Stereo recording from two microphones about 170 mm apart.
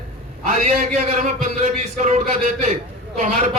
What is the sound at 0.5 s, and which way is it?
A man's voice, 40° right (ahead or behind).